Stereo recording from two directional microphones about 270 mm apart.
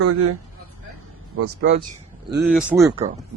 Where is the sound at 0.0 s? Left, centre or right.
Right.